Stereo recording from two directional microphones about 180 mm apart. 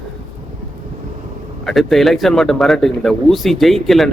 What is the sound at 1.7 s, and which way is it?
A man's voice, centre (ahead or behind).